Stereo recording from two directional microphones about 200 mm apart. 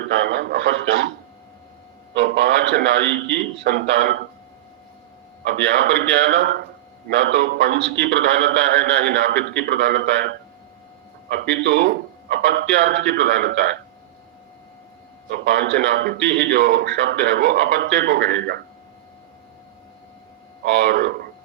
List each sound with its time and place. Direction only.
0.0 s speech: 55° right (ahead or behind)
2.1 s a man's voice: 60° right (ahead or behind)
5.5 s a man's voice: 55° right (ahead or behind)
11.5 s a man's voice: 55° right (ahead or behind)
15.3 s a man's voice: 60° right (ahead or behind)
20.7 s a man's voice: 55° right (ahead or behind)